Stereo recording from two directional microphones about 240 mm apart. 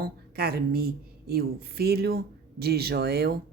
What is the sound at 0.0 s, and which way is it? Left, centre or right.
A woman's voice, right.